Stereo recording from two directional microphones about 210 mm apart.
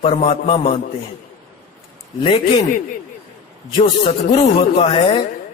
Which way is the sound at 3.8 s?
25° left (ahead or behind).